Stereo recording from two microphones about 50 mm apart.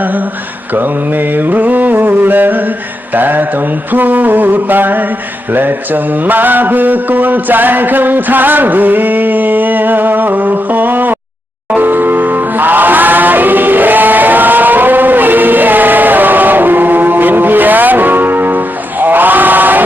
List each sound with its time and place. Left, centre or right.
0.7 s mantra: right
11.8 s music: right